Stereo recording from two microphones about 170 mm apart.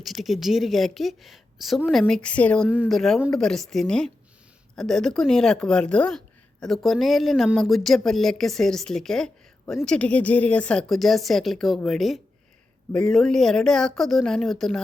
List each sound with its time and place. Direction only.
0.0 s speech: centre (ahead or behind)
2.6 s speech: 5° right (ahead or behind)